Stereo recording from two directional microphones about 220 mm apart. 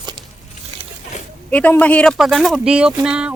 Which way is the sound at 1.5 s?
5° left (ahead or behind).